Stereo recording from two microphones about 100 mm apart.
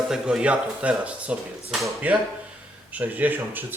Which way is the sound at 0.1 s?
10° right (ahead or behind).